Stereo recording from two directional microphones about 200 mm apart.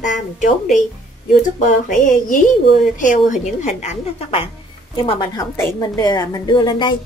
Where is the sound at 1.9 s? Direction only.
40° left (ahead or behind); by 5.5 s 25° left (ahead or behind).